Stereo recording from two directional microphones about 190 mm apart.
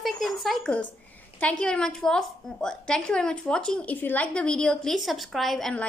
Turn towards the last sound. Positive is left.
turn(degrees=5)  # may be behind; listen again after turning